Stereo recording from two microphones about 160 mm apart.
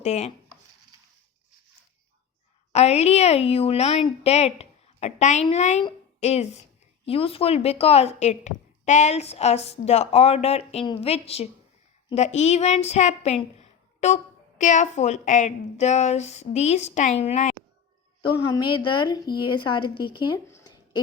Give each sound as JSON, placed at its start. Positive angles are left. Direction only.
{"t": 0.0, "sound": "a woman's voice", "side_deg": 40}
{"t": 2.7, "sound": "a woman's voice", "side_deg": 40}
{"t": 18.2, "sound": "a woman's voice", "side_deg": 30}
{"t": 20.5, "sound": "a sound", "side_deg": 15}